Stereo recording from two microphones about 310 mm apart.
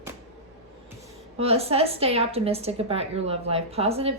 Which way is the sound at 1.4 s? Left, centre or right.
Centre.